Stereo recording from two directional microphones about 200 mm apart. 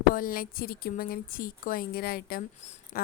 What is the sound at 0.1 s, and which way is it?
Speech, 45° left (ahead or behind).